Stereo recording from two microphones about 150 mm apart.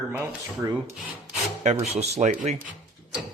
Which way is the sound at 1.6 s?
45° right (ahead or behind).